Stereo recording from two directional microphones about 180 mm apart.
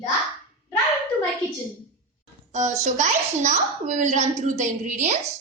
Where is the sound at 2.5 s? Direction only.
40° right (ahead or behind).